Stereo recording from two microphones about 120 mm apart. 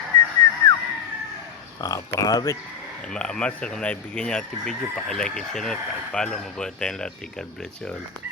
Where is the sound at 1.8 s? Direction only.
30° left (ahead or behind).